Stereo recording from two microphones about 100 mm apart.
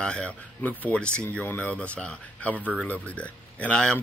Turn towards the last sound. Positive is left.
turn(degrees=10)  # may be behind; listen again after turning